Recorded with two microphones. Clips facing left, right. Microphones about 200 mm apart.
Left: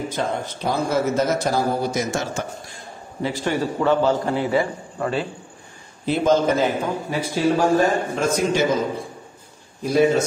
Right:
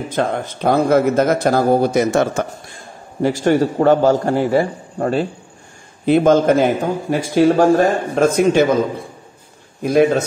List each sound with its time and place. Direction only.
0.1 s a man's voice: 55° right (ahead or behind)
3.4 s a man's voice: 45° right (ahead or behind)
6.0 s a man's voice: 55° right (ahead or behind)
9.8 s a man's voice: 55° right (ahead or behind)